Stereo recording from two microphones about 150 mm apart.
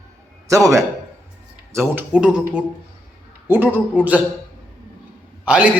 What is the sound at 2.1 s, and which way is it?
A man's voice, 5° right (ahead or behind).